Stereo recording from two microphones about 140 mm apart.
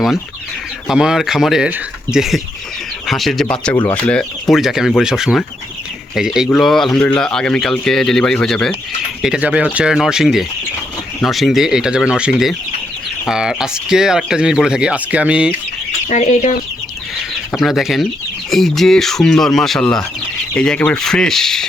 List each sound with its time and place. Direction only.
0.9 s speech: 5° right (ahead or behind)
16.0 s speech: 55° left (ahead or behind)
17.6 s speech: centre (ahead or behind)